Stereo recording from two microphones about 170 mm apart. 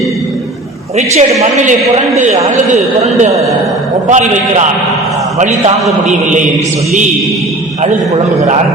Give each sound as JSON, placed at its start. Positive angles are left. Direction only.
{"t": 0.9, "sound": "a man's voice", "side_deg": -40}